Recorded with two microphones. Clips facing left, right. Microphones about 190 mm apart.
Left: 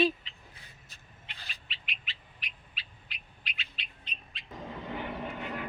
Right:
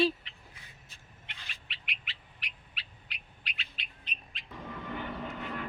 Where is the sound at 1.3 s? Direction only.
35° left (ahead or behind).